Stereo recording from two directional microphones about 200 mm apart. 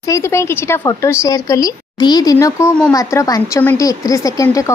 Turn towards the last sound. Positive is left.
turn(degrees=15)  # may be behind; listen again after turning